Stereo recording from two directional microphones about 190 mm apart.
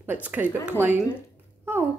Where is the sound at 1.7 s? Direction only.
10° right (ahead or behind).